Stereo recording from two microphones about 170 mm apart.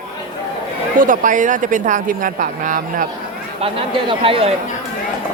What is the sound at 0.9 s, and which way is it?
Speech, 50° right (ahead or behind).